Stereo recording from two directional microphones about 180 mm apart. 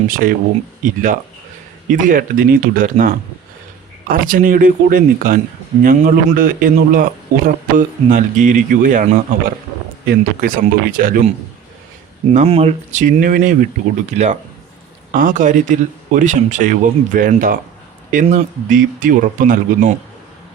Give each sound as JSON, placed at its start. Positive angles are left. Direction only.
{"t": 0.1, "sound": "a man's voice", "side_deg": -50}
{"t": 4.1, "sound": "a man's voice", "side_deg": -50}
{"t": 10.1, "sound": "a man's voice", "side_deg": -50}
{"t": 12.3, "sound": "a man's voice", "side_deg": -40}